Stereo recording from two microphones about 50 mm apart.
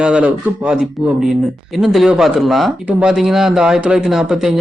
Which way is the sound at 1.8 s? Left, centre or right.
Centre.